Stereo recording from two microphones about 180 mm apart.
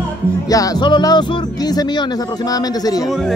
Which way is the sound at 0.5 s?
20° left (ahead or behind).